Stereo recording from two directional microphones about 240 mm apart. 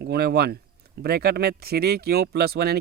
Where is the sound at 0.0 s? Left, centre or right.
Right.